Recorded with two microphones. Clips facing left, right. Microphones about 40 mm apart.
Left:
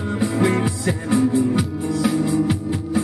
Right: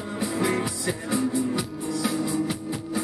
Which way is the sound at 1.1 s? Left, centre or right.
Left.